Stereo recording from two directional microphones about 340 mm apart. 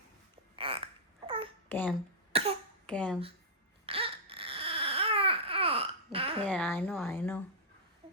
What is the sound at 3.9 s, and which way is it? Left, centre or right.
Baby cry, centre.